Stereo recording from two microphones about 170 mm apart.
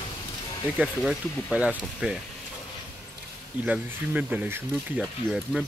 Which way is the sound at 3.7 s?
10° right (ahead or behind).